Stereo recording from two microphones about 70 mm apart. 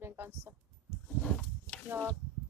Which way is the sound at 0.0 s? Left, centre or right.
Right.